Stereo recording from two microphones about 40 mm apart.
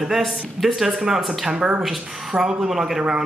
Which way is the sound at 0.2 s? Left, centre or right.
Centre.